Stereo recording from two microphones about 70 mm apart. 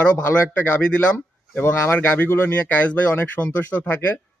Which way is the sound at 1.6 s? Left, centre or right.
Left.